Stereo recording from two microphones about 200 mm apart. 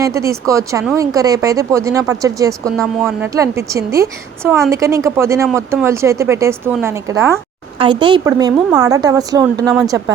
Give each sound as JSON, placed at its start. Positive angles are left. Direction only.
{"t": 0.0, "sound": "a woman's voice", "side_deg": -15}
{"t": 2.7, "sound": "a woman's voice", "side_deg": 0}
{"t": 3.2, "sound": "a woman's voice", "side_deg": -15}